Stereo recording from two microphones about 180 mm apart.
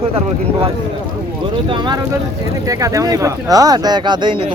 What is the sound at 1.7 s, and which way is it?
Speech, 25° right (ahead or behind).